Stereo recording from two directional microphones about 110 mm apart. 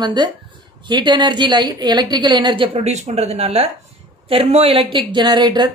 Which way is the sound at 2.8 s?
80° right.